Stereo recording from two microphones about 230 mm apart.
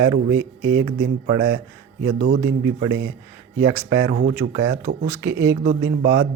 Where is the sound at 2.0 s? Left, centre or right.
Right.